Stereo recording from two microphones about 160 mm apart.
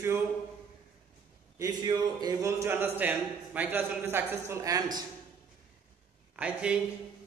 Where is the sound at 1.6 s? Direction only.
25° right (ahead or behind).